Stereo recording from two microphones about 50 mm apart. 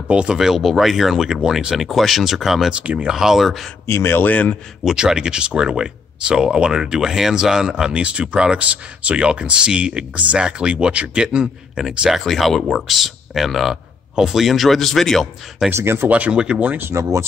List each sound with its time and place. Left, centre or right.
0.1 s speech: centre
0.4 s speech: centre
1.9 s speech: centre
2.7 s speech: right
3.1 s speech: centre
3.8 s a man's voice: left
4.3 s a man's voice: left
4.9 s speech: centre
12.1 s speech: centre
15.7 s speech: right
16.1 s speech: right